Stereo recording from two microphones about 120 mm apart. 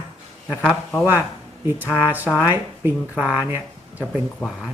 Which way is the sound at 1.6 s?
15° right (ahead or behind).